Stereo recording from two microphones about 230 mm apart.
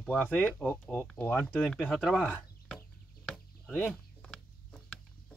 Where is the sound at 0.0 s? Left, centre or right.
Centre.